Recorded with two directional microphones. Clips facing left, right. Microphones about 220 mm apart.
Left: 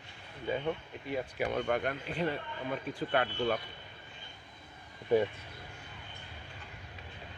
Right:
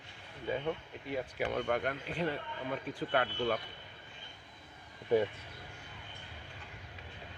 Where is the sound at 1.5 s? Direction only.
20° left (ahead or behind).